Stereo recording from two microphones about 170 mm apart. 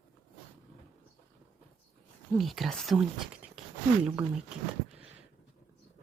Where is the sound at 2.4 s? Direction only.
Centre (ahead or behind).